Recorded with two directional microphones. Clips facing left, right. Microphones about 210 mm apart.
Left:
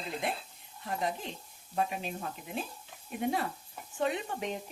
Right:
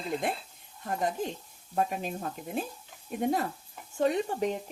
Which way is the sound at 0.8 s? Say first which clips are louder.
Right 4 dB; 45° right (ahead or behind).